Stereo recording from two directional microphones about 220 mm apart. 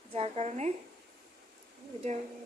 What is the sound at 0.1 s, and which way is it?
Speech, 25° right (ahead or behind).